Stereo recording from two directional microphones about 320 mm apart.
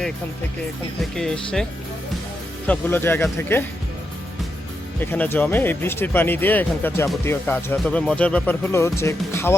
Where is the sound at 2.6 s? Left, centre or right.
Centre.